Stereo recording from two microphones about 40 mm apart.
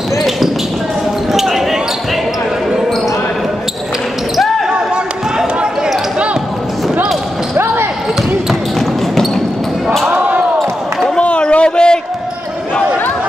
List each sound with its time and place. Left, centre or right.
1.3 s basketball bounce: centre
7.5 s basketball bounce: right
8.7 s basketball bounce: centre
10.1 s basketball bounce: right
11.1 s a sound: left